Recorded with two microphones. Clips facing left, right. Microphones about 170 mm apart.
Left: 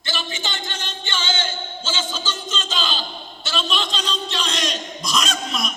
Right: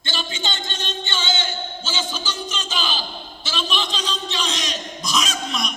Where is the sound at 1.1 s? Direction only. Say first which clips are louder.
Left 1 dB; 15° right (ahead or behind).